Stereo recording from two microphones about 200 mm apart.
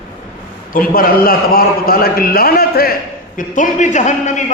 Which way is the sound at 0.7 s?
45° left (ahead or behind).